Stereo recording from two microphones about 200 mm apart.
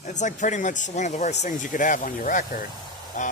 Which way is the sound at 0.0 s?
35° left (ahead or behind).